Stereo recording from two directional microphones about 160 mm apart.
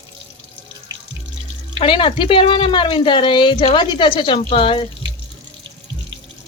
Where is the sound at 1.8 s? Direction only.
35° left (ahead or behind).